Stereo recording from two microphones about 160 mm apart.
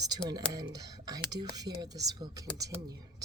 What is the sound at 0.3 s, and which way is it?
Speech, 25° right (ahead or behind).